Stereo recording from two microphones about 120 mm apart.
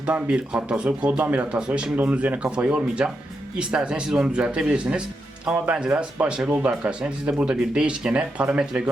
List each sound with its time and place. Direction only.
0.0 s speech: 10° right (ahead or behind)